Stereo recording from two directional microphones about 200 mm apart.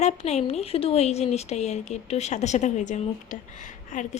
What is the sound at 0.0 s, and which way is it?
Speech, 35° left (ahead or behind).